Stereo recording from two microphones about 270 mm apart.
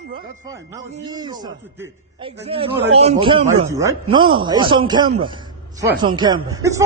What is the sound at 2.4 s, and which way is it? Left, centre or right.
A man's voice, right.